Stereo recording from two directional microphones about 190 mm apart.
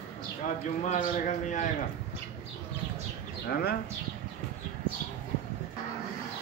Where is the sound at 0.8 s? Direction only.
35° left (ahead or behind).